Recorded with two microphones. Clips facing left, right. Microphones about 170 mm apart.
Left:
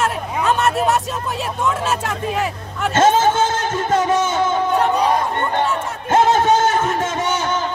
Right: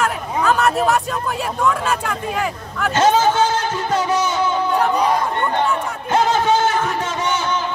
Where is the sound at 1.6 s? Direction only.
25° left (ahead or behind).